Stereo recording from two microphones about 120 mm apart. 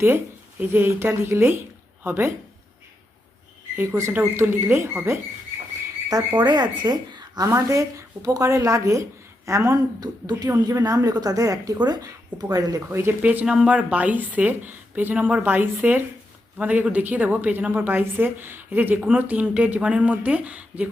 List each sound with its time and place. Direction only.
0.6 s speech: 20° right (ahead or behind)
3.8 s speech: 20° right (ahead or behind)
6.1 s a woman's voice: 35° right (ahead or behind); by 20.9 s 10° right (ahead or behind)